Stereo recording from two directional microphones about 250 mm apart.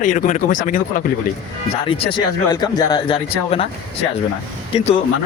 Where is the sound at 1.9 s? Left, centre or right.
Left.